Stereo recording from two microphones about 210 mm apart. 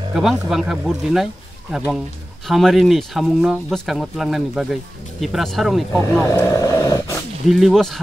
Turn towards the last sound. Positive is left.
turn(degrees=0)  # may be behind; listen again after turning